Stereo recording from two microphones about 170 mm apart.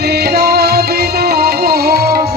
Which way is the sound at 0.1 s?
70° right (ahead or behind).